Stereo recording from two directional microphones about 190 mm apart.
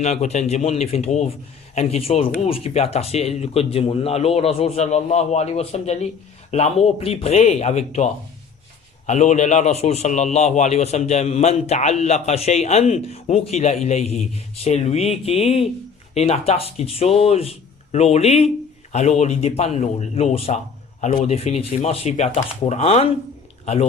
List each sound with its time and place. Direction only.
0.0 s a man's voice: 35° left (ahead or behind)